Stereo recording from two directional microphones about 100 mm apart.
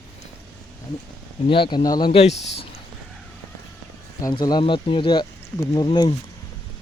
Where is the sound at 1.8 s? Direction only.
45° left (ahead or behind).